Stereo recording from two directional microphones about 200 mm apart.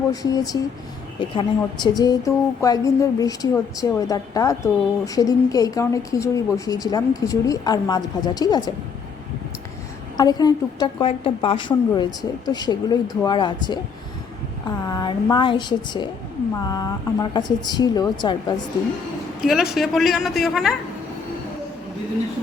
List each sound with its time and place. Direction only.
0.1 s speech: 20° left (ahead or behind)
10.2 s speech: 20° left (ahead or behind)
14.8 s speech: 20° left (ahead or behind)
19.4 s a woman's voice: centre (ahead or behind)